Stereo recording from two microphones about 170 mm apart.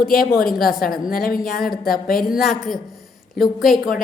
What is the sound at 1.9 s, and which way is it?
Speech, 60° left (ahead or behind).